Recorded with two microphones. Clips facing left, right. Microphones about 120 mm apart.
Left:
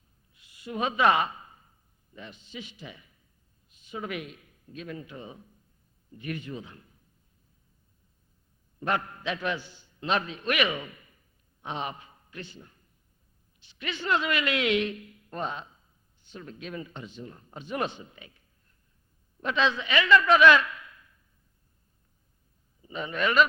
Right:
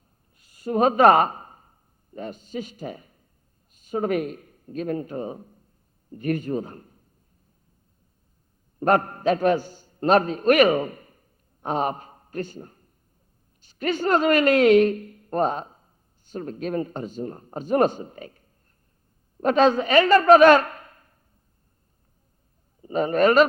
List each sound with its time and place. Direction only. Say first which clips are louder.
0.3 s a sound: right 10 dB; 40° right (ahead or behind)
2.1 s a man's voice: right 11 dB; 45° right (ahead or behind)
8.8 s a man's voice: right 10 dB; 45° right (ahead or behind)
22.8 s a man's voice: right 11 dB; 45° right (ahead or behind)